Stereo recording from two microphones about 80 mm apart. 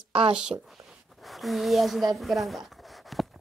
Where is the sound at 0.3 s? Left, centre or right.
Centre.